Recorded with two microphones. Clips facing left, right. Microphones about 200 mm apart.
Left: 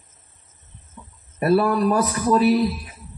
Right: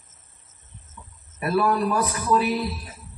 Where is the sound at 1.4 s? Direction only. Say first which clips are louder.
Left 4 dB; 45° left (ahead or behind).